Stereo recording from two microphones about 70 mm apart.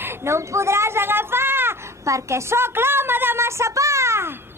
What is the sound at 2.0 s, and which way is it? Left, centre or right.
A woman's voice, right.